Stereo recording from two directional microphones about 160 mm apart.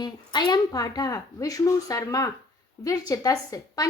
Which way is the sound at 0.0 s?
25° left (ahead or behind).